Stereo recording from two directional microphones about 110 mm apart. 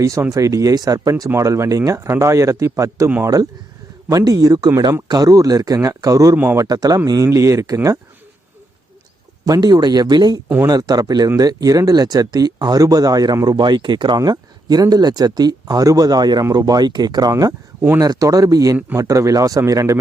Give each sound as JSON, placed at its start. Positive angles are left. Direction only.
{"t": 0.0, "sound": "a man's voice", "side_deg": -30}
{"t": 4.1, "sound": "speech", "side_deg": -35}
{"t": 6.3, "sound": "speech", "side_deg": -15}
{"t": 6.6, "sound": "a man's voice", "side_deg": -35}
{"t": 9.5, "sound": "speech", "side_deg": -35}
{"t": 18.0, "sound": "a man's voice", "side_deg": -35}